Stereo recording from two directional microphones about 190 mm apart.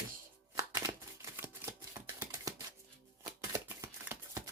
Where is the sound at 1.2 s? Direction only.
15° right (ahead or behind).